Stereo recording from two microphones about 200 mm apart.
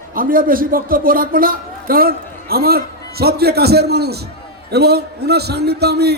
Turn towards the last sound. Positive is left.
turn(degrees=-55)  # may be behind; listen again after turning